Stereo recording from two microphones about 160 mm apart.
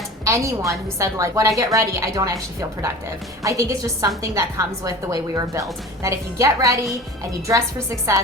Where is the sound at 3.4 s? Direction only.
20° right (ahead or behind).